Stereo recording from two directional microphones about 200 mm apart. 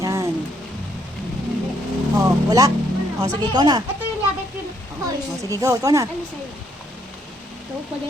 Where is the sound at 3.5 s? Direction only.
20° right (ahead or behind).